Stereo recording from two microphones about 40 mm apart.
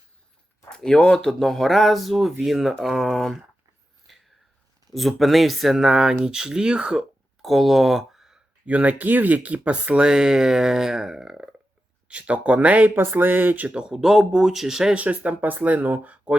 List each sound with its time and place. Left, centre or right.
0.9 s speech: left; by 3.1 s centre
3.1 s speech: centre
4.9 s speech: centre
5.7 s speech: centre
7.4 s speech: centre
8.6 s speech: right; by 11.4 s centre
12.0 s speech: right
13.0 s speech: right
13.9 s speech: centre
14.9 s speech: right